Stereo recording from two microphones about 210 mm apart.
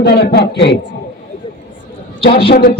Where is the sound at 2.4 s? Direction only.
50° left (ahead or behind).